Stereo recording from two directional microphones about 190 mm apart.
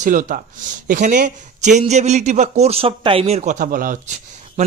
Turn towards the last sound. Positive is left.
turn(degrees=-45)  # may be behind; listen again after turning